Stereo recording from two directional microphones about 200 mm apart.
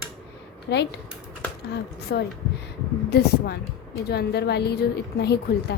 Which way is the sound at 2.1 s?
55° left (ahead or behind).